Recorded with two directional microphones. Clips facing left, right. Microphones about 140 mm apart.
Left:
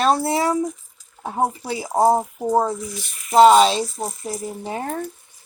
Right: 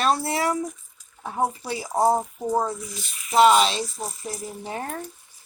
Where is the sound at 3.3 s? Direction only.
30° left (ahead or behind).